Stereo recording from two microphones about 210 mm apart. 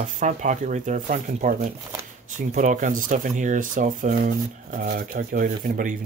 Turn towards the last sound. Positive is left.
turn(degrees=-40)  # may be behind; listen again after turning